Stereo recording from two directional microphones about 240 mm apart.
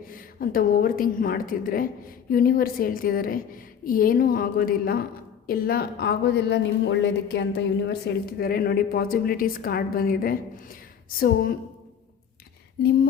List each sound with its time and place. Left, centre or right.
0.1 s a woman's voice: left